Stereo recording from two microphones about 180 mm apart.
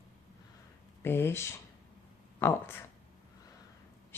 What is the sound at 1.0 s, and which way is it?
Speech, 10° left (ahead or behind).